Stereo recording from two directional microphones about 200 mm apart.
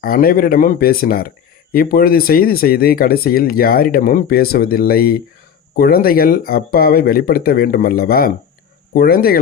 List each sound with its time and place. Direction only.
0.0 s speech: 45° left (ahead or behind)